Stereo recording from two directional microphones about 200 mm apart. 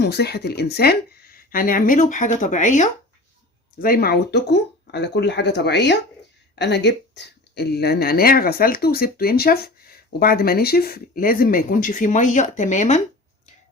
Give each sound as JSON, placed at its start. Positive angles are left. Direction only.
{"t": 0.0, "sound": "a woman's voice", "side_deg": 55}